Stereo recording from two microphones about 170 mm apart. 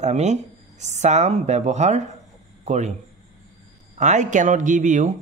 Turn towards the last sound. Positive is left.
turn(degrees=-50)  # may be behind; listen again after turning